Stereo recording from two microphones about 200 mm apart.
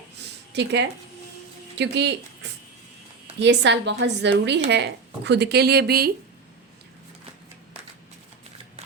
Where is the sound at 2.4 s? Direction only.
60° right (ahead or behind).